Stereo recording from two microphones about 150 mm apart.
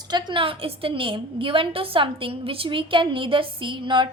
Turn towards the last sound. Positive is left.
turn(degrees=-35)  # may be behind; listen again after turning